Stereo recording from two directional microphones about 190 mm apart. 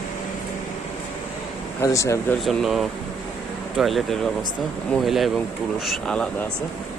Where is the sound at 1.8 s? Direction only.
15° left (ahead or behind).